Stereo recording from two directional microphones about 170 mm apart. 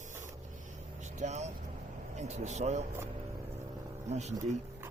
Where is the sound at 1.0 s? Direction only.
45° right (ahead or behind).